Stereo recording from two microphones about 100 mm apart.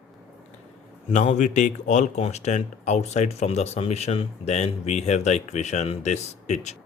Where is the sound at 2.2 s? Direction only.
90° left.